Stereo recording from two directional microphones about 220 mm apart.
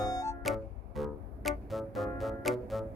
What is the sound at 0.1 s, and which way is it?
Music, 15° left (ahead or behind).